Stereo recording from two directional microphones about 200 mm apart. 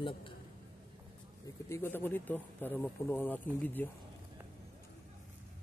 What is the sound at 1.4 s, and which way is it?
Speech, 10° left (ahead or behind).